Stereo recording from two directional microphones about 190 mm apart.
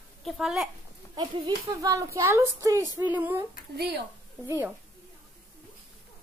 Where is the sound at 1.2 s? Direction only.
20° right (ahead or behind).